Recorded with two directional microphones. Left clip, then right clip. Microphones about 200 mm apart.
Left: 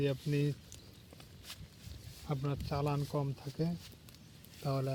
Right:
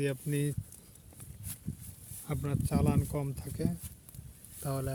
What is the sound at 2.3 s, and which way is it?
Speech, 45° right (ahead or behind).